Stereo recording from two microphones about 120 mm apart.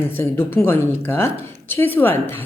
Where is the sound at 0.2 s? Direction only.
20° left (ahead or behind).